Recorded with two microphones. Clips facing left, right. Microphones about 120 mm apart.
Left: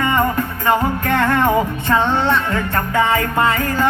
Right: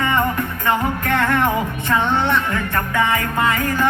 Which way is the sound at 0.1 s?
15° left (ahead or behind).